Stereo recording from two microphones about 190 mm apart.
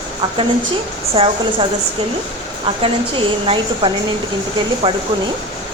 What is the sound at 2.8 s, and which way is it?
A woman's voice, 30° right (ahead or behind).